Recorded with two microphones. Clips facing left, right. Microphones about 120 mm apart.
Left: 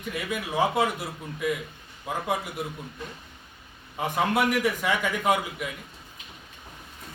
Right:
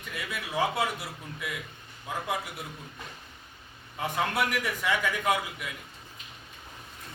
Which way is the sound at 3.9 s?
20° left (ahead or behind).